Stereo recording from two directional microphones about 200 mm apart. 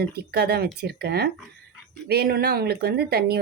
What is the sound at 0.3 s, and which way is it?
Speech, 55° right (ahead or behind).